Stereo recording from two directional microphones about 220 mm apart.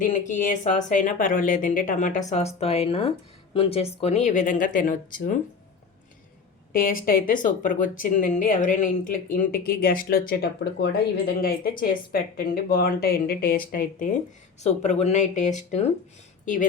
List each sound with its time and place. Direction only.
0.0 s speech: 35° left (ahead or behind)
6.7 s speech: 40° left (ahead or behind)